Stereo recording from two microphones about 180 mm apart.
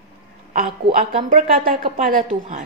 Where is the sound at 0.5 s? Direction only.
55° right (ahead or behind).